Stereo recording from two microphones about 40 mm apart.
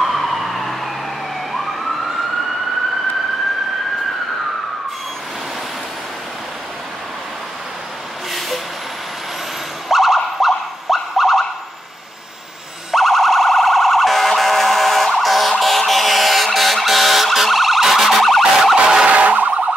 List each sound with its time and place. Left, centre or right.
0.0 s emergency vehicle: centre
8.3 s vehicle: centre
9.8 s music: centre
12.9 s siren: centre
15.1 s emergency vehicle: centre
18.8 s emergency vehicle: centre
19.0 s a sound: right